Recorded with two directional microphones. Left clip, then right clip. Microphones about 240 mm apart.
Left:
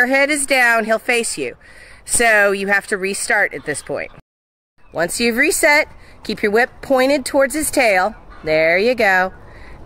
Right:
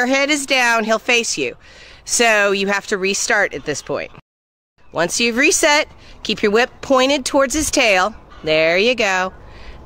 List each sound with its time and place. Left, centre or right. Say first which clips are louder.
0.0 s speech: left 2 dB; centre